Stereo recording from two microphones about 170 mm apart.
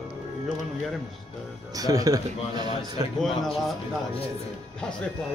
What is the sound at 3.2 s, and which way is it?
Speech, centre (ahead or behind).